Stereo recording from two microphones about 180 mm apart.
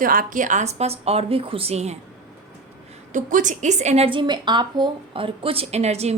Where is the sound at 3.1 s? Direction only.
45° right (ahead or behind).